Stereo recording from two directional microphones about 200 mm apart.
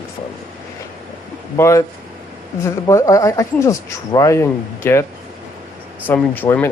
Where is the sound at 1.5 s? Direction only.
15° left (ahead or behind).